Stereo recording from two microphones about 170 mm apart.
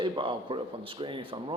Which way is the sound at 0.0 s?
30° right (ahead or behind).